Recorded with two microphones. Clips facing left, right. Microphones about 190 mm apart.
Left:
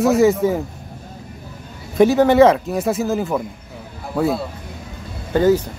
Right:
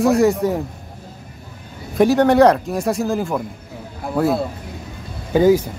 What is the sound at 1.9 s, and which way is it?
Speech, centre (ahead or behind).